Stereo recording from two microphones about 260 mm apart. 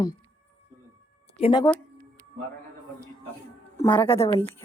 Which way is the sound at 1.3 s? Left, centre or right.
Centre.